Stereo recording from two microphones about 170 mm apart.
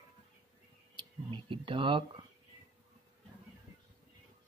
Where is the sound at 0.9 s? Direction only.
30° right (ahead or behind).